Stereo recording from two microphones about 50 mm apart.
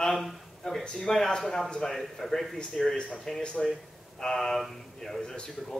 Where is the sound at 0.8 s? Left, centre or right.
Centre.